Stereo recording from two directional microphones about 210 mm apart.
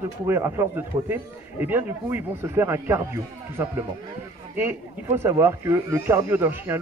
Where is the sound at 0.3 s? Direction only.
10° right (ahead or behind).